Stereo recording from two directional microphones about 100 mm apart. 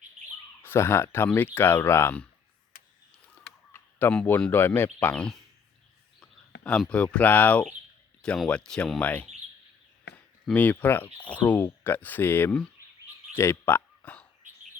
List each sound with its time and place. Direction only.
0.6 s speech: 25° left (ahead or behind)
3.7 s speech: 20° left (ahead or behind)
5.1 s speech: 10° left (ahead or behind)
10.5 s speech: 15° left (ahead or behind)
12.5 s speech: 10° left (ahead or behind)
13.3 s a sound: 25° left (ahead or behind)